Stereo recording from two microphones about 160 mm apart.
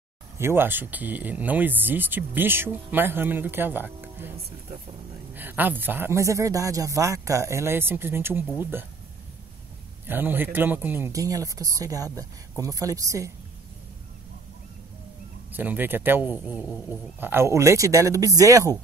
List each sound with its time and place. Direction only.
0.4 s speech: 15° right (ahead or behind)
5.3 s speech: 10° right (ahead or behind)
10.0 s speech: 15° right (ahead or behind)
15.5 s speech: 10° right (ahead or behind)